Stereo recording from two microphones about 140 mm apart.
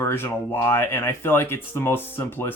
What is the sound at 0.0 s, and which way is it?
Speech, 15° left (ahead or behind).